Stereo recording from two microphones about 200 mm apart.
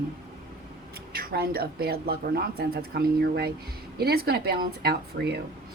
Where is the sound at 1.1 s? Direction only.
50° right (ahead or behind).